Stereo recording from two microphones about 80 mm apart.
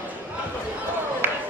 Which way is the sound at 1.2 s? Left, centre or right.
Right.